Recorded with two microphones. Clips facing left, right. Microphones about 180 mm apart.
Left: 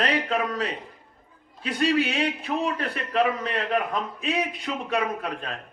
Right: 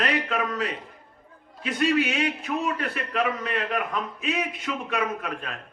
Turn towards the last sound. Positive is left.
turn(degrees=35)  # may be behind; listen again after turning